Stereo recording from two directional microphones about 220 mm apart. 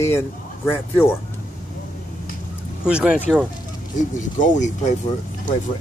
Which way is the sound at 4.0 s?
35° left (ahead or behind).